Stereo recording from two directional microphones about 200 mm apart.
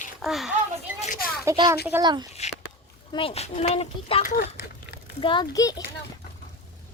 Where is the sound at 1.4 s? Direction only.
15° right (ahead or behind).